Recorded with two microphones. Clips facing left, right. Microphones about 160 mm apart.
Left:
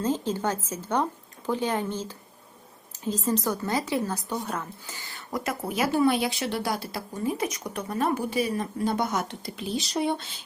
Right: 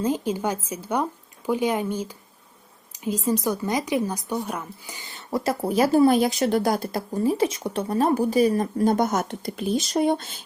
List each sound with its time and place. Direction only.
0.0 s a woman's voice: 10° right (ahead or behind); by 10.4 s 45° right (ahead or behind)